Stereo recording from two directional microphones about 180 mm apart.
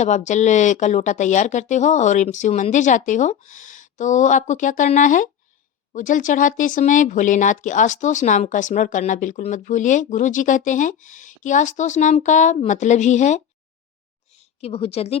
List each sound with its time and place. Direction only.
0.0 s speech: 40° left (ahead or behind)